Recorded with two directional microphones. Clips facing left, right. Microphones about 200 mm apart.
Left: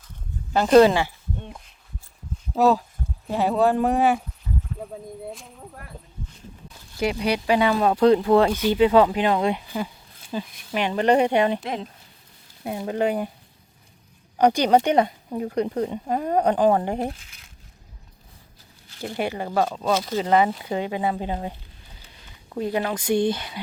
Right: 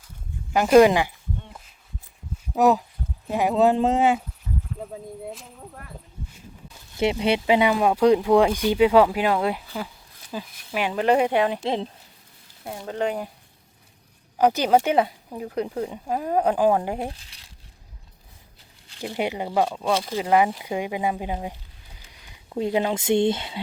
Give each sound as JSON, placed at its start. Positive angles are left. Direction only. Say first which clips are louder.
{"t": 0.5, "sound": "speech", "louder": "even", "side_deg": -10}
{"t": 2.6, "sound": "speech", "louder": "even", "side_deg": -20}
{"t": 5.3, "sound": "speech", "louder": "even", "side_deg": 0}
{"t": 6.9, "sound": "speech", "louder": "right 2 dB", "side_deg": -25}
{"t": 9.6, "sound": "speech", "louder": "left 3 dB", "side_deg": 10}
{"t": 10.3, "sound": "speech", "louder": "left 2 dB", "side_deg": -5}
{"t": 11.6, "sound": "speech", "louder": "right 4 dB", "side_deg": -25}
{"t": 12.6, "sound": "speech", "louder": "left 3 dB", "side_deg": 15}
{"t": 14.3, "sound": "speech", "louder": "left 1 dB", "side_deg": -5}
{"t": 17.2, "sound": "speech", "louder": "even", "side_deg": -35}
{"t": 18.9, "sound": "speech", "louder": "even", "side_deg": -15}